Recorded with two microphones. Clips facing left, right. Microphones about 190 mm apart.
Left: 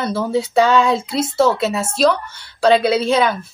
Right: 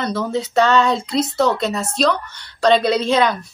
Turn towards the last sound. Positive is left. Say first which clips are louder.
# left 1 dB
turn(degrees=5)  # may be behind; listen again after turning